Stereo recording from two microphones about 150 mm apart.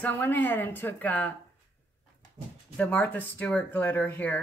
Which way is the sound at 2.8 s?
10° left (ahead or behind).